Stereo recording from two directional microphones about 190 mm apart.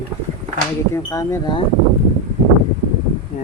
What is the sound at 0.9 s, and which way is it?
Speech, 20° left (ahead or behind).